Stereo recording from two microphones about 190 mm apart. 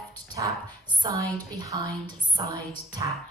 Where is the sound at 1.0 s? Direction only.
20° right (ahead or behind).